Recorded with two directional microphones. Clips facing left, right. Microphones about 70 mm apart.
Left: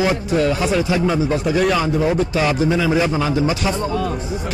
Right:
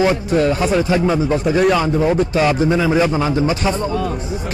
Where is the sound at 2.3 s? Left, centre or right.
Right.